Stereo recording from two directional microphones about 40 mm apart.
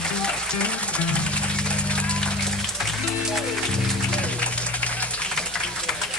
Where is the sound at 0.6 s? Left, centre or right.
Left.